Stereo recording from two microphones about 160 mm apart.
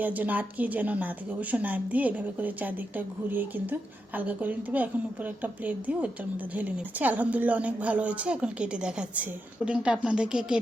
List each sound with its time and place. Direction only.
0.0 s a woman's voice: 10° right (ahead or behind)